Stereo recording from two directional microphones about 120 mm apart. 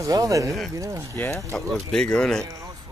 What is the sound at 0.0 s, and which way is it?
Speech, 30° right (ahead or behind).